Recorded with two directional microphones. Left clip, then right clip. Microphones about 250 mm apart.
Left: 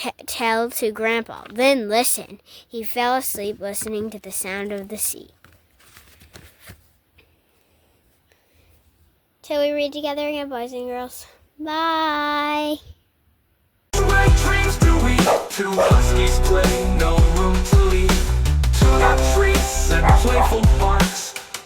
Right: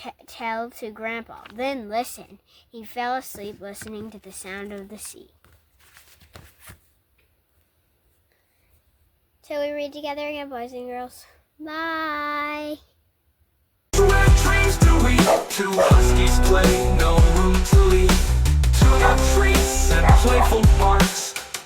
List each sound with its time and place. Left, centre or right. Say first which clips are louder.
0.0 s a woman's voice: left 8 dB; left
9.4 s speech: left 6 dB; left
13.9 s music: even; centre